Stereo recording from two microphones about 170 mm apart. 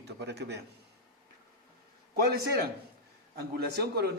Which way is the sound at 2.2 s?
65° right (ahead or behind).